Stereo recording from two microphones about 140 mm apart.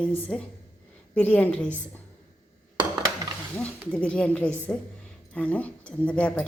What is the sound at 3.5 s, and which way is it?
A woman's voice, 10° left (ahead or behind).